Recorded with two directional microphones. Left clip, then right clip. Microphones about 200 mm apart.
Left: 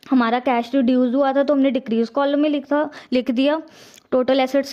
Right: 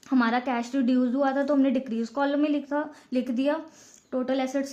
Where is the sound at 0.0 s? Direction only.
40° left (ahead or behind).